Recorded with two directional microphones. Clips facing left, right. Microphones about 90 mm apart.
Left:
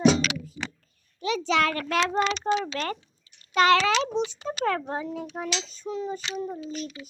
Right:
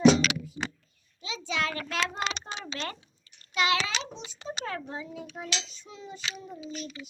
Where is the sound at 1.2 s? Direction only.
65° left (ahead or behind); by 4.3 s 80° left.